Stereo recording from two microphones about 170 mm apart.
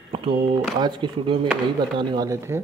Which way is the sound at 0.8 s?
30° right (ahead or behind).